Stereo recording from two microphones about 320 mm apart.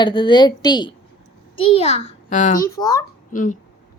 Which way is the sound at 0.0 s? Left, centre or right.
Centre.